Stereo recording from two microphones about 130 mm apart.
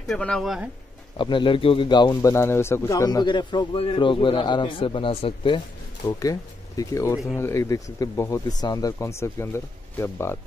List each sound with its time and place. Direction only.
0.1 s speech: 5° left (ahead or behind)
1.1 s a man's voice: 40° left (ahead or behind)
2.3 s a man's voice: 20° left (ahead or behind); by 5.6 s 45° left (ahead or behind)
6.0 s speech: 25° left (ahead or behind)